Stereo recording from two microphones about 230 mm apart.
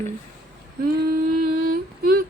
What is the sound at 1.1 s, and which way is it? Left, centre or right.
Humming, right.